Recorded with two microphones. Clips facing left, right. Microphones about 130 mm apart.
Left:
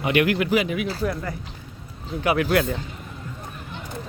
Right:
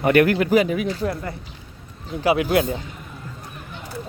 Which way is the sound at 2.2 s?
20° right (ahead or behind).